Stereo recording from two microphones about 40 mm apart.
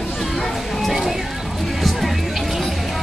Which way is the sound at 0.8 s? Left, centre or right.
Centre.